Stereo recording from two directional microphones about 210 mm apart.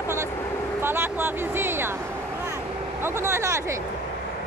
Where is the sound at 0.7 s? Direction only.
10° right (ahead or behind).